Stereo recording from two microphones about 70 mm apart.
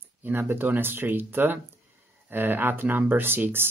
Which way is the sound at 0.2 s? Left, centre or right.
Right.